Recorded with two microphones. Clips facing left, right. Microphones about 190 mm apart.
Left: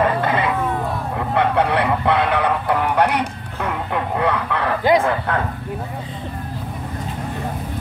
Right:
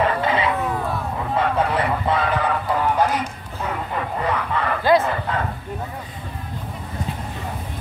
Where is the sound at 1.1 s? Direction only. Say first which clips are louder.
Left 4 dB; 70° left (ahead or behind).